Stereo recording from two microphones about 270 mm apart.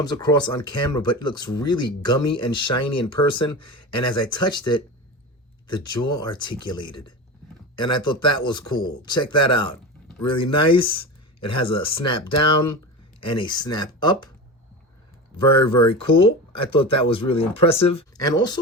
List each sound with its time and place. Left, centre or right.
0.0 s speech: centre
15.6 s speech: centre